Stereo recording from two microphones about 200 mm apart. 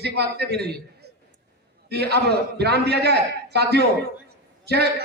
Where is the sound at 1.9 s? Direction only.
55° right (ahead or behind).